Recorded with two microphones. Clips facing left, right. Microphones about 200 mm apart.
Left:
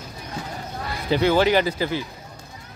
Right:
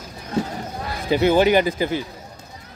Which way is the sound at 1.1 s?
15° right (ahead or behind).